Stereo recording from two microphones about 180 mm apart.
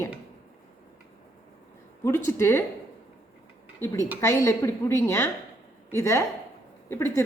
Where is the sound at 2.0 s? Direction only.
15° left (ahead or behind).